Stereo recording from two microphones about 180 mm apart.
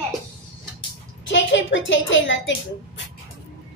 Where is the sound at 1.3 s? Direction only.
90° left.